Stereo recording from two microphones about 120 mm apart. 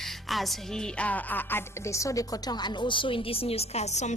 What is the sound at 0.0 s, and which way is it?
Speech, centre (ahead or behind).